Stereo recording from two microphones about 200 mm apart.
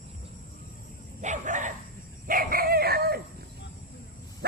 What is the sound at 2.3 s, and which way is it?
Chicken, 45° right (ahead or behind).